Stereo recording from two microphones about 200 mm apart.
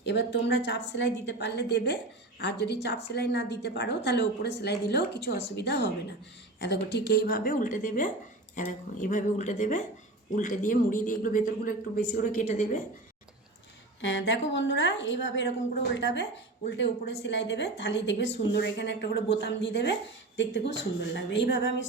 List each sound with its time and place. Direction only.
0.0 s a woman's voice: 60° left (ahead or behind); by 12.8 s 40° left (ahead or behind)
14.0 s a woman's voice: 60° left (ahead or behind)